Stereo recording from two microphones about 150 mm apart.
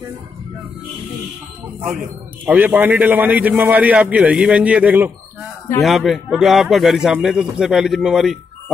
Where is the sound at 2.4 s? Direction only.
10° right (ahead or behind).